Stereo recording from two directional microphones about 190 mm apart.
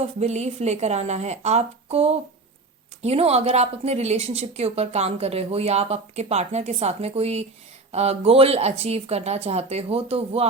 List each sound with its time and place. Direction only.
0.0 s a woman's voice: 35° right (ahead or behind)